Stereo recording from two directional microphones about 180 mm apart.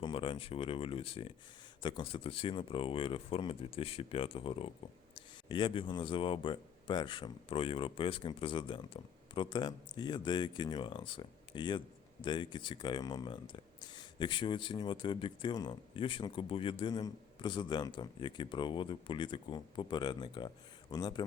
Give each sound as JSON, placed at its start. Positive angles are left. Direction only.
{"t": 0.0, "sound": "speech", "side_deg": 25}